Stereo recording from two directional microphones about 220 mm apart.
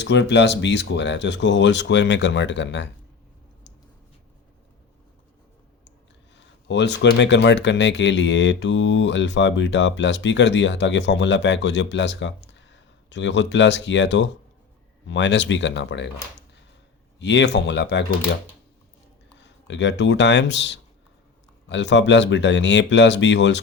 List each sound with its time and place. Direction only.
0.0 s speech: 50° left (ahead or behind)
6.3 s speech: 50° left (ahead or behind)
17.2 s speech: 55° left (ahead or behind)
19.4 s speech: 55° left (ahead or behind)